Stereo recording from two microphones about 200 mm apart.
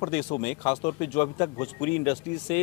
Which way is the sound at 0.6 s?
25° left (ahead or behind).